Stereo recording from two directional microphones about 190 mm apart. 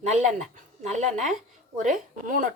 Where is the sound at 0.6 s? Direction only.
40° right (ahead or behind).